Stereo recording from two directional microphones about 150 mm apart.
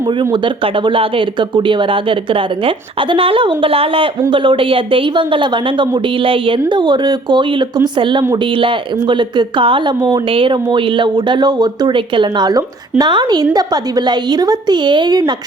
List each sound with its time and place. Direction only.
0.2 s speech: 30° right (ahead or behind)